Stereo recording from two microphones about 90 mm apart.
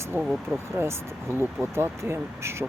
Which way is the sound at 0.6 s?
30° right (ahead or behind).